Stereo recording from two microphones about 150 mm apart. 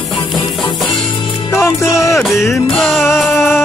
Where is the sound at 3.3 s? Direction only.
15° left (ahead or behind).